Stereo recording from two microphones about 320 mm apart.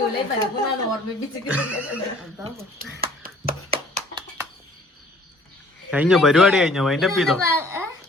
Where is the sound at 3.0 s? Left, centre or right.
Right.